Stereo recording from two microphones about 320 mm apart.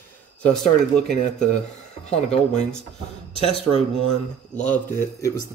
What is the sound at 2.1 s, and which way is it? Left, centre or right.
Speech, centre.